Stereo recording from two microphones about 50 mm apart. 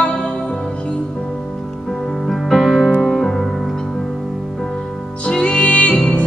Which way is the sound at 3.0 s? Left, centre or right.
Centre.